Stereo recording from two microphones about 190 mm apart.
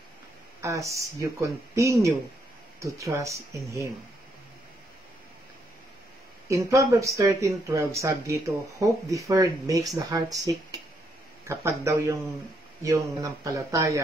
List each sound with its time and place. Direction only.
0.6 s speech: 15° right (ahead or behind)
6.5 s speech: 15° right (ahead or behind)